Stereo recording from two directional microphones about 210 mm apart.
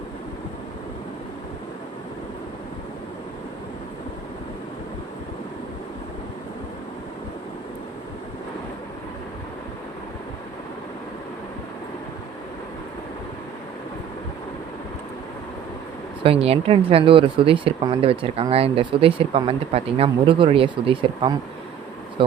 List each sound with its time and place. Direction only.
16.2 s speech: 25° right (ahead or behind)